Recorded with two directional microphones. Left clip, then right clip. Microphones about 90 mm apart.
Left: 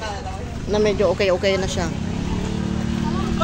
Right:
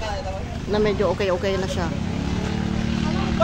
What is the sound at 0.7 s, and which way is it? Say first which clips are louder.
Speech: left 3 dB; 5° left (ahead or behind).